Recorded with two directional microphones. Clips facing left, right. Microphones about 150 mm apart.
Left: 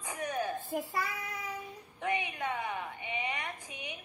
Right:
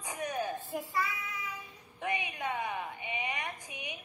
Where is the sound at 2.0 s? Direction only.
15° right (ahead or behind).